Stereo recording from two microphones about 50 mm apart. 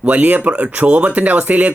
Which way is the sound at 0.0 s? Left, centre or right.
Right.